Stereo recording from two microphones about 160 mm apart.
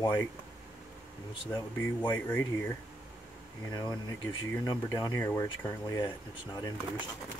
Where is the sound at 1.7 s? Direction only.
10° left (ahead or behind).